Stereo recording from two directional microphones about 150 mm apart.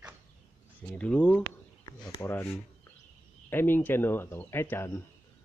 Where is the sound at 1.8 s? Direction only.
25° left (ahead or behind).